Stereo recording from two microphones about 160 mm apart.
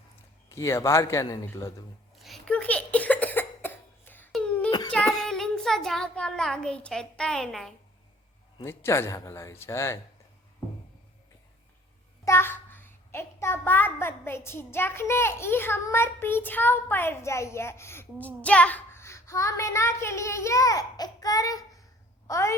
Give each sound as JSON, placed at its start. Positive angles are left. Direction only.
{"t": 0.4, "sound": "a man's voice", "side_deg": 20}
{"t": 2.1, "sound": "cough", "side_deg": 0}
{"t": 4.9, "sound": "child singing", "side_deg": 5}
{"t": 8.6, "sound": "a child's voice", "side_deg": 15}
{"t": 12.2, "sound": "a child's voice", "side_deg": 15}